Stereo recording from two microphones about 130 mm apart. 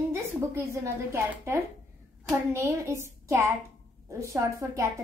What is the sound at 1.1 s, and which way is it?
A woman's voice, 15° right (ahead or behind).